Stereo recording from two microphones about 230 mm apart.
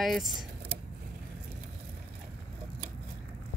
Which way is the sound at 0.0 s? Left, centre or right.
Centre.